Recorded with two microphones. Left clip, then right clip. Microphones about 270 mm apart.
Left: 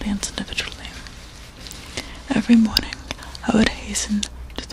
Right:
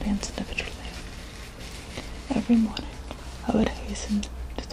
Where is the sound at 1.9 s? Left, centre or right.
Left.